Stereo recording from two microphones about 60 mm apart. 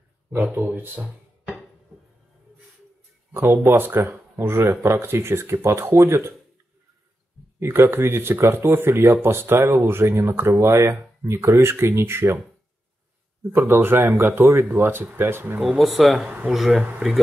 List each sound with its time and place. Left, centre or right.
0.4 s speech: right
3.3 s speech: right
4.4 s speech: right
7.6 s speech: right
11.7 s speech: right
13.6 s speech: right
15.8 s speech: centre
16.3 s speech: right